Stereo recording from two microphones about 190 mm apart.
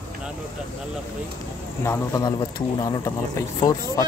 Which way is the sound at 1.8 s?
15° left (ahead or behind).